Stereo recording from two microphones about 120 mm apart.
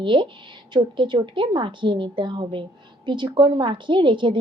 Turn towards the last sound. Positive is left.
turn(degrees=-40)  # may be behind; listen again after turning